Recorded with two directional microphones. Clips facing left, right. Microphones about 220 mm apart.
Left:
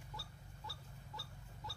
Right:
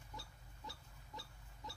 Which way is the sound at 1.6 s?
20° right (ahead or behind).